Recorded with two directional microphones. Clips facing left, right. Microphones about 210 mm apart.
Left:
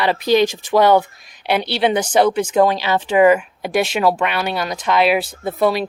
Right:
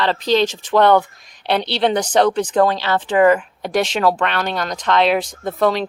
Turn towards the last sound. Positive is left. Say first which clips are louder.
# even
turn(degrees=10)  # may be behind; listen again after turning